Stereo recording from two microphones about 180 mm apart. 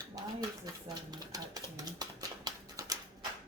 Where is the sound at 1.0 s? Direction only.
20° right (ahead or behind).